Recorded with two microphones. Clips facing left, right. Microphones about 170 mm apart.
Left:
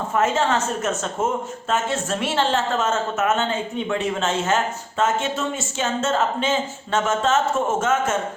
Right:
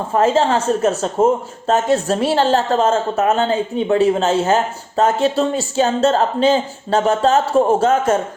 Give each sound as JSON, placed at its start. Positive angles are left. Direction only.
{"t": 0.1, "sound": "a woman's voice", "side_deg": -30}